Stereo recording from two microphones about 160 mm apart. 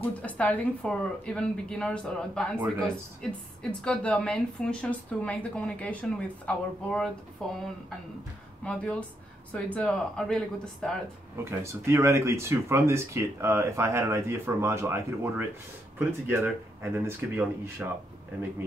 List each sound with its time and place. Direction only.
0.0 s a woman's voice: 10° left (ahead or behind)
9.5 s speech: 10° left (ahead or behind)
11.6 s speech: 20° right (ahead or behind)